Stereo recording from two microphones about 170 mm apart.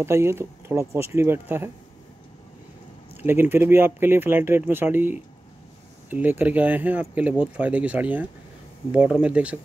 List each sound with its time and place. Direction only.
0.0 s speech: 15° right (ahead or behind)
3.2 s speech: 10° right (ahead or behind)